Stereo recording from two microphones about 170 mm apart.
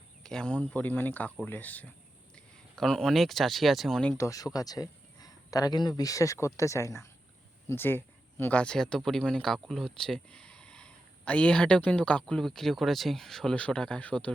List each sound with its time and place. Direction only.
0.2 s speech: 5° left (ahead or behind)
4.2 s speech: 20° left (ahead or behind)